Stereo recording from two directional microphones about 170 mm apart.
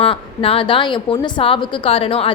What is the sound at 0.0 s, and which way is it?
A woman's voice, 30° left (ahead or behind).